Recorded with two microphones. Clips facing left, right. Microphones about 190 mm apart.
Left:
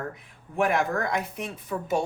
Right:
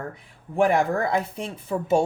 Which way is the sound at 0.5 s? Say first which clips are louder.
Right 4 dB; 35° right (ahead or behind).